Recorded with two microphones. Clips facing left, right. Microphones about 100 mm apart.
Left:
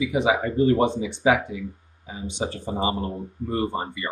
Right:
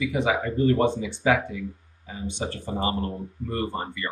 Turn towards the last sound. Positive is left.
turn(degrees=20)  # may be behind; listen again after turning